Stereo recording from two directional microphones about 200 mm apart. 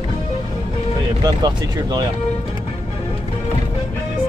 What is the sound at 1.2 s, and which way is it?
Speech, 20° right (ahead or behind).